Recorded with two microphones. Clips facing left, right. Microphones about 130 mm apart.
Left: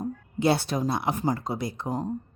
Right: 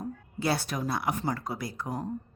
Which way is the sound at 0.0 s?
20° left (ahead or behind).